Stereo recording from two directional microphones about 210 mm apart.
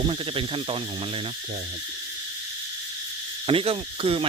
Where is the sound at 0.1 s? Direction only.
25° right (ahead or behind).